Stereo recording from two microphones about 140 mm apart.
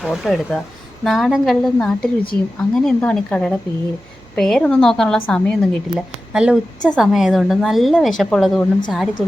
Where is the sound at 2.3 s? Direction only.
15° left (ahead or behind).